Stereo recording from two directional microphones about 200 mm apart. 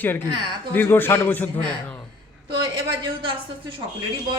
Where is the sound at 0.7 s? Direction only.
10° left (ahead or behind).